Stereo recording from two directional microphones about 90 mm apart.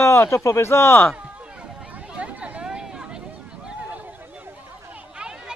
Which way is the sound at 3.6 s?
15° right (ahead or behind).